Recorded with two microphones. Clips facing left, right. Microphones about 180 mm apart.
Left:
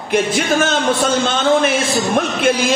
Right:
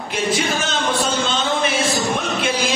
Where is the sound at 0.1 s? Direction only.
50° left (ahead or behind).